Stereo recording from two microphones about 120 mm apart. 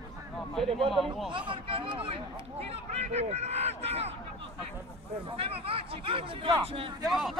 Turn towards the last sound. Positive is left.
turn(degrees=0)  # may be behind; listen again after turning